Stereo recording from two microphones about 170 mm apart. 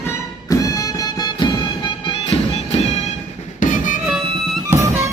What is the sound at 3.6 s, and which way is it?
Music, 50° left (ahead or behind).